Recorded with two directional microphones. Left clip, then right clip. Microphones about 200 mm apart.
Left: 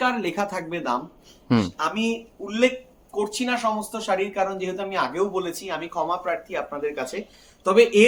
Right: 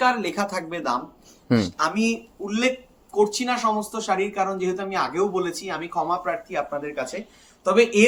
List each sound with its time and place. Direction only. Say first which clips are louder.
0.0 s speech: right 2 dB; 10° left (ahead or behind); by 8.0 s 30° left (ahead or behind)